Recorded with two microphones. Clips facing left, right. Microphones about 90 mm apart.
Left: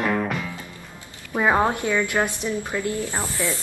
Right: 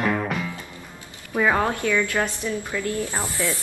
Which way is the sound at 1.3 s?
20° left (ahead or behind).